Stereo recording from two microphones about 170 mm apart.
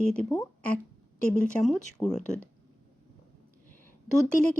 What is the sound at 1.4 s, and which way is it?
Speech, 5° left (ahead or behind).